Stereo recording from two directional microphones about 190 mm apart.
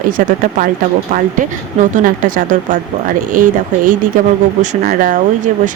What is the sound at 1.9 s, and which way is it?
Speech, 45° right (ahead or behind).